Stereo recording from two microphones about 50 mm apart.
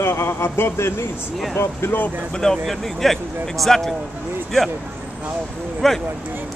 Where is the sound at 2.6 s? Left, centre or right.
Centre.